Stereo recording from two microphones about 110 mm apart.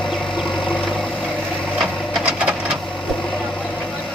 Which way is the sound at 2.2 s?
5° right (ahead or behind).